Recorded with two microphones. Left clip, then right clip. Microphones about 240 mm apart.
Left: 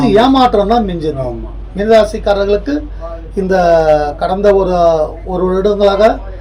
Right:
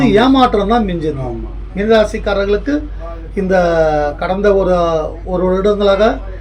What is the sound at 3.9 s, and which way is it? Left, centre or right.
Speech, centre.